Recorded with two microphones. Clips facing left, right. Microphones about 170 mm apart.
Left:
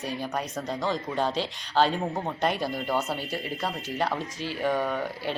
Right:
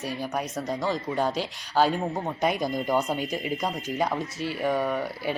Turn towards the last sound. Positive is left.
turn(degrees=-10)  # may be behind; listen again after turning